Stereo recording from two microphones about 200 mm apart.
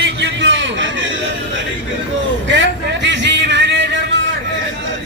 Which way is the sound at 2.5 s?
65° right (ahead or behind).